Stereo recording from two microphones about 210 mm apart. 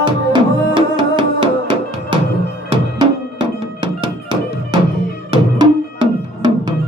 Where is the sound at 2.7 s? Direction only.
20° right (ahead or behind).